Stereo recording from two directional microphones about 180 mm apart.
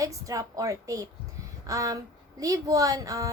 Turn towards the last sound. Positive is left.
turn(degrees=-20)  # may be behind; listen again after turning